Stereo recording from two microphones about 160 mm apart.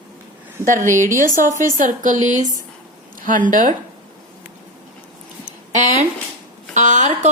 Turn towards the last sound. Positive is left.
turn(degrees=-50)  # may be behind; listen again after turning